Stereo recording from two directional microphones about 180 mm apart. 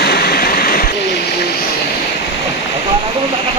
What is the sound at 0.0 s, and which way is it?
Waterfall, 60° left (ahead or behind).